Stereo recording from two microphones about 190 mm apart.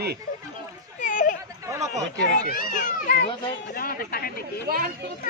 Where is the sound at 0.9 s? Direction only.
45° left (ahead or behind).